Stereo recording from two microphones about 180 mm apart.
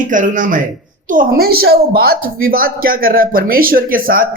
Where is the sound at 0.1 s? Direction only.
45° right (ahead or behind).